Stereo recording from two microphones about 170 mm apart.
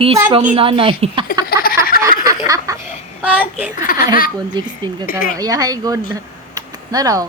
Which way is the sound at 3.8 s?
55° left (ahead or behind).